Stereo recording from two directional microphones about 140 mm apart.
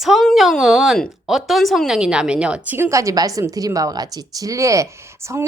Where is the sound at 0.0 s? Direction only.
Centre (ahead or behind).